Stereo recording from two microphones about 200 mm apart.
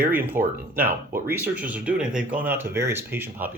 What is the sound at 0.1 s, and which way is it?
Speech, 10° right (ahead or behind).